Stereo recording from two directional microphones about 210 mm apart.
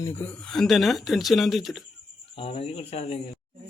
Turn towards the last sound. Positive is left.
turn(degrees=30)  # may be behind; listen again after turning